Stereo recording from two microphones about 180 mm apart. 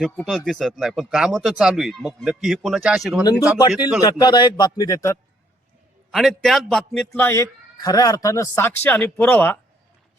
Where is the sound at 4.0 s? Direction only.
25° left (ahead or behind).